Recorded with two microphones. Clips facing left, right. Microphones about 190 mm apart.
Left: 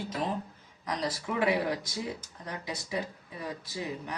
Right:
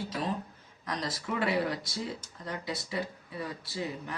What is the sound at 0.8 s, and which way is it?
Speech, 15° left (ahead or behind).